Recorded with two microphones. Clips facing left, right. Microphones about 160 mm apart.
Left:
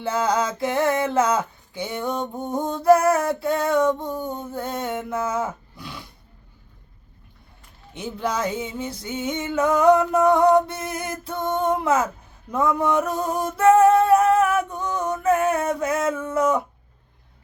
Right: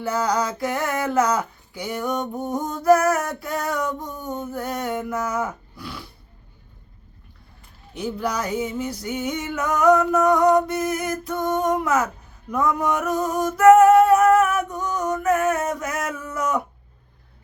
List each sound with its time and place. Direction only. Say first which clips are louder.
0.0 s speech: even; 25° left (ahead or behind)
7.9 s speech: even; 25° left (ahead or behind)
12.5 s a sound: left 1 dB; 25° left (ahead or behind)